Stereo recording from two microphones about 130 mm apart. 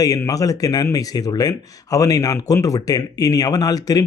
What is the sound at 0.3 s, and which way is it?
Speech, 25° left (ahead or behind).